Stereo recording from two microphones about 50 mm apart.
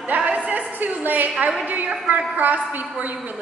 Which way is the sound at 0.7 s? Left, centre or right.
Right.